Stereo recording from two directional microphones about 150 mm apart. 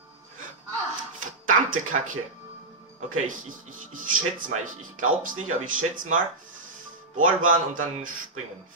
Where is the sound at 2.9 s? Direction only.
55° right (ahead or behind).